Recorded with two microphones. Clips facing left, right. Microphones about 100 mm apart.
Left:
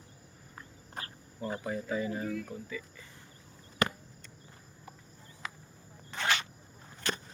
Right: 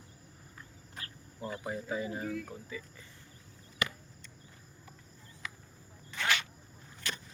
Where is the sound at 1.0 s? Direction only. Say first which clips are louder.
Left 5 dB; 45° left (ahead or behind).